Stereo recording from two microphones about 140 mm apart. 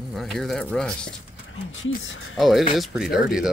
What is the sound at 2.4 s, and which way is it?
Speech, centre (ahead or behind).